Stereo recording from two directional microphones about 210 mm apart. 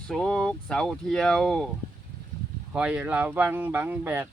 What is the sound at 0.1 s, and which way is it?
Speech, 5° left (ahead or behind).